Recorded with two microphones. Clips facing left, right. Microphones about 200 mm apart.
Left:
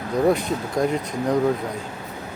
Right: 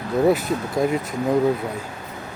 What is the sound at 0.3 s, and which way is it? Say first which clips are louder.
Speech: right 1 dB; 5° right (ahead or behind).